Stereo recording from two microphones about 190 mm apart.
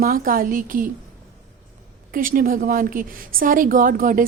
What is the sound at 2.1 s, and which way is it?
A woman's voice, 45° right (ahead or behind).